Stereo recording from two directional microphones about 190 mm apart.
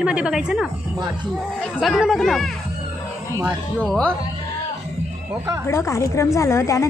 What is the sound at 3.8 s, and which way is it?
Speech, 5° left (ahead or behind).